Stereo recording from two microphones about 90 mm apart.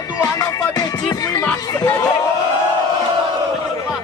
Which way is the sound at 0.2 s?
40° left (ahead or behind).